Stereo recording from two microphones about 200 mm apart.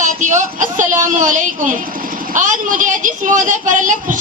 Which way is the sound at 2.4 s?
40° right (ahead or behind).